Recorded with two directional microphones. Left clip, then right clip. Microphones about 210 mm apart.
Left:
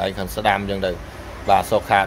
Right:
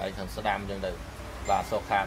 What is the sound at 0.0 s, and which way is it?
Speech, 35° left (ahead or behind).